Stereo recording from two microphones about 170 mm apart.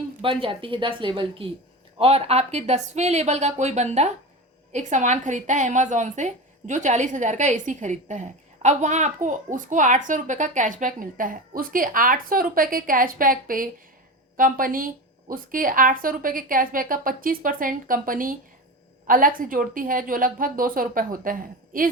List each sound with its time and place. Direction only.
0.2 s a woman's voice: 30° right (ahead or behind); by 21.8 s 55° right (ahead or behind)